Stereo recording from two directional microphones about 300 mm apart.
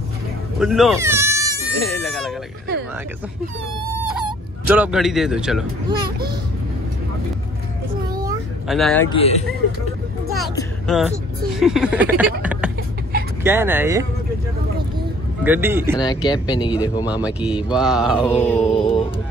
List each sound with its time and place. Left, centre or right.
0.6 s insect: centre
1.8 s goat: centre
4.6 s a man's voice: centre
8.6 s a man's voice: centre
9.1 s speech: centre
10.9 s a man's voice: centre
15.4 s speech: centre
16.1 s speech: centre
17.0 s a man's voice: centre
18.6 s a sound: centre